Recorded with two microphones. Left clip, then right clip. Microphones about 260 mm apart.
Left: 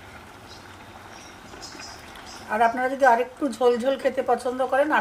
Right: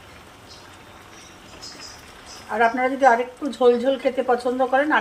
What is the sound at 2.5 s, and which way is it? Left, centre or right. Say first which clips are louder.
A woman's voice: right 2 dB; left.